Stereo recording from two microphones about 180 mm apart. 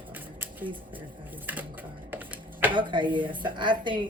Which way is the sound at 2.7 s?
25° right (ahead or behind).